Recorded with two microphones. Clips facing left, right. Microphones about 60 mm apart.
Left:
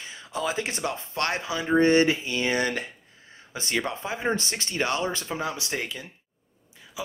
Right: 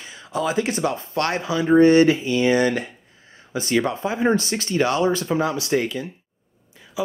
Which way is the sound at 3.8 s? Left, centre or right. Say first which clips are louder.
Right 7 dB; right.